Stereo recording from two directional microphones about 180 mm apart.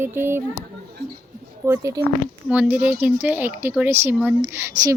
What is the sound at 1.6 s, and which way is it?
Speech, 15° right (ahead or behind).